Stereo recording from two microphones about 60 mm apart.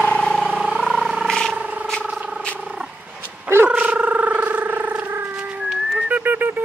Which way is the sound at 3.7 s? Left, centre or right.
Right.